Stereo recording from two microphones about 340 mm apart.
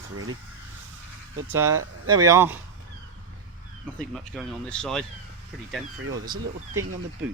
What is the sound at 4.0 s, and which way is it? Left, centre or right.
Speech, centre.